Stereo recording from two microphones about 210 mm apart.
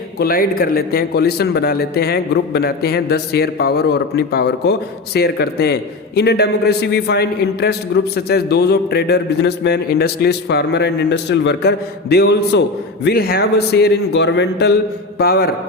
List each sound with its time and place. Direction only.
0.2 s a man's voice: 45° left (ahead or behind)